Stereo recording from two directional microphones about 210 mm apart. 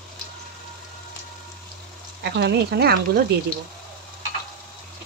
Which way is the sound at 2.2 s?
55° right (ahead or behind).